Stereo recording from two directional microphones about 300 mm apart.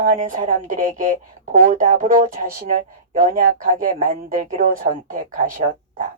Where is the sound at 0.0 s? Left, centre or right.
Right.